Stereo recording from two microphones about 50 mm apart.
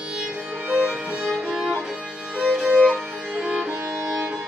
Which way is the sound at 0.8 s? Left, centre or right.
Centre.